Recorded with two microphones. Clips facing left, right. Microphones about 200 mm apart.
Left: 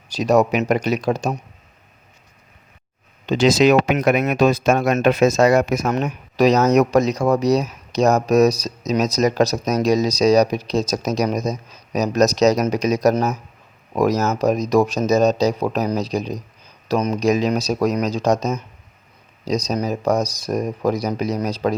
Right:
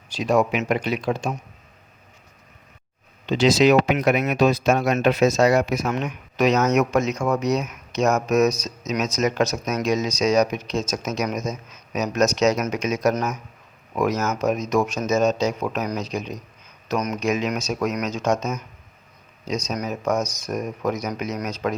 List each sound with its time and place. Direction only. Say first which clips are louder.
0.1 s speech: left 4 dB; 40° left (ahead or behind)
3.2 s speech: left 2 dB; 45° left (ahead or behind)